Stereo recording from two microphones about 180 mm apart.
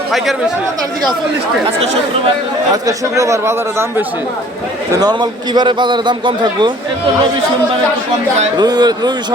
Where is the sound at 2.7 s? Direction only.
20° right (ahead or behind).